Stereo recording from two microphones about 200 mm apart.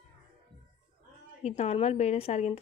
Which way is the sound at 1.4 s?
30° left (ahead or behind).